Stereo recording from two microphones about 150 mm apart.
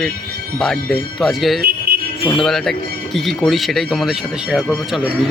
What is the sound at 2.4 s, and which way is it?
Speech, centre (ahead or behind).